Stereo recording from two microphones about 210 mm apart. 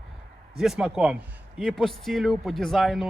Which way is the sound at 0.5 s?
Centre (ahead or behind).